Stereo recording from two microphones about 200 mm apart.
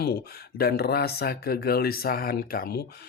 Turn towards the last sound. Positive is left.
turn(degrees=50)  # may be behind; listen again after turning